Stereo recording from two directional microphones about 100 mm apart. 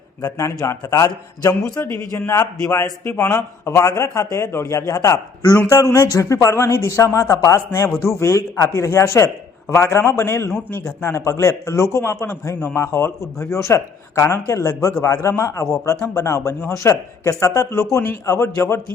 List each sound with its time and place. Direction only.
0.3 s a man's voice: 30° left (ahead or behind)